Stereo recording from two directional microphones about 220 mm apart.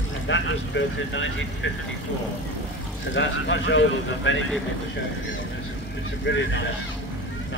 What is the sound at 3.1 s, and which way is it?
Speech, 55° left (ahead or behind).